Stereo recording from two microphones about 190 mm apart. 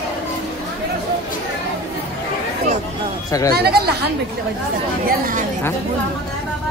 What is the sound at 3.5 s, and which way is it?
Speech, 55° right (ahead or behind).